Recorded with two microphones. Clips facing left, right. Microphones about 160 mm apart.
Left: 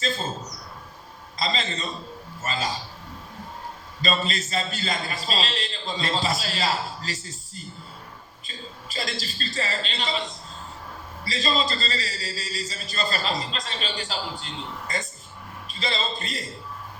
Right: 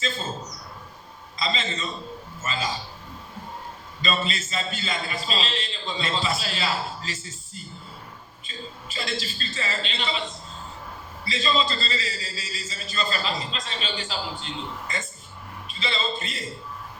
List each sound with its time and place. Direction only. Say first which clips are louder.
1.4 s a man's voice: left 1 dB; 40° left (ahead or behind)
4.0 s a man's voice: left 1 dB; 40° left (ahead or behind)
8.9 s a man's voice: even; 40° left (ahead or behind)
11.3 s a man's voice: right 1 dB; 40° left (ahead or behind)
15.6 s a man's voice: even; 40° left (ahead or behind)